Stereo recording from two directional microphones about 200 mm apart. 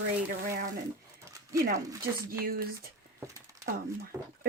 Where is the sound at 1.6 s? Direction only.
40° right (ahead or behind).